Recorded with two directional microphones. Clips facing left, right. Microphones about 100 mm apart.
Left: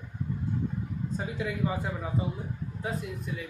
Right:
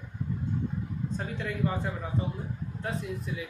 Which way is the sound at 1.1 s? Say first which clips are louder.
Left 2 dB; 5° left (ahead or behind).